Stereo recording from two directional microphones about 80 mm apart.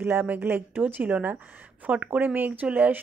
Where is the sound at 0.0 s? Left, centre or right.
Right.